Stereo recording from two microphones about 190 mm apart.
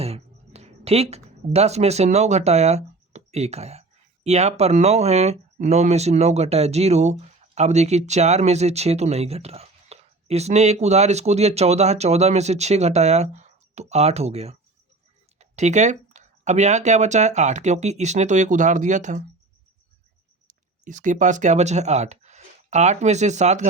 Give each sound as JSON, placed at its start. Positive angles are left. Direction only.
{"t": 0.0, "sound": "speech", "side_deg": -35}
{"t": 20.5, "sound": "speech", "side_deg": -40}